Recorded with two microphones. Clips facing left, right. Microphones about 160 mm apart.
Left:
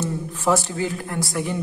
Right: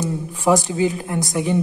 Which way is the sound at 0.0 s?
15° right (ahead or behind).